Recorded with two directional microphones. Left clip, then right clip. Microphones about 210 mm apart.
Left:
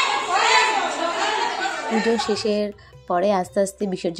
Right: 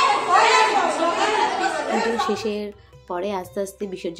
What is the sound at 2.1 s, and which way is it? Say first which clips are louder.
Speech: left 2 dB; 20° left (ahead or behind).